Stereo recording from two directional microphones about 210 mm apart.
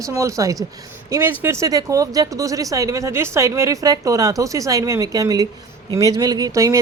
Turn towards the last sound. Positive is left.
turn(degrees=-15)  # may be behind; listen again after turning